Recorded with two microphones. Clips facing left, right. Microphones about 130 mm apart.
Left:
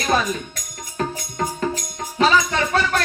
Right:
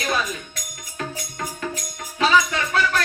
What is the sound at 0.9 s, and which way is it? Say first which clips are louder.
Music: left 6 dB; 35° left (ahead or behind).